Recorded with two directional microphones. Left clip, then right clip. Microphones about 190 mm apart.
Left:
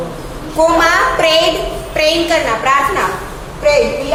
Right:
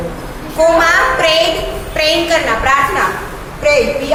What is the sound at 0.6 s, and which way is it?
A woman's voice, 25° left (ahead or behind).